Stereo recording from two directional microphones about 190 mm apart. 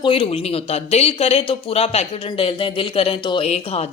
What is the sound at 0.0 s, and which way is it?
A woman's voice, 30° left (ahead or behind).